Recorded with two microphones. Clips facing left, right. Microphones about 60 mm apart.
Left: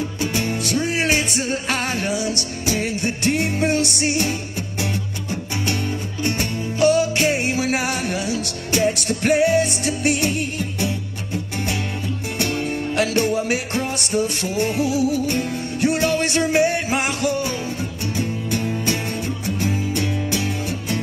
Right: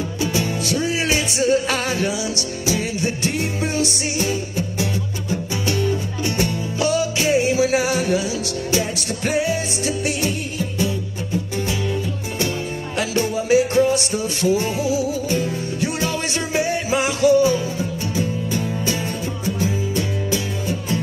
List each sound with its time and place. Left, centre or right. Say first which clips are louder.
0.2 s music: right 2 dB; left
12.9 s music: left 2 dB; left